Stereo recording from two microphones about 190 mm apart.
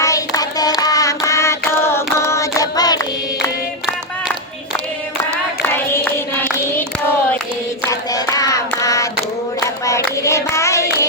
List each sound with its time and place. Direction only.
0.0 s child singing: 20° left (ahead or behind)
0.8 s music: 20° left (ahead or behind)
5.6 s child singing: 10° left (ahead or behind)
7.9 s child singing: 20° left (ahead or behind)
9.8 s hands: 15° left (ahead or behind)